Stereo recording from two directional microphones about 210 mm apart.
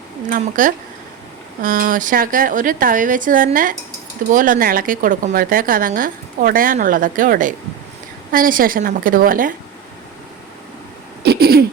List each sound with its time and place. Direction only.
0.3 s a woman's voice: 40° right (ahead or behind)
11.2 s throat clearing: 50° right (ahead or behind)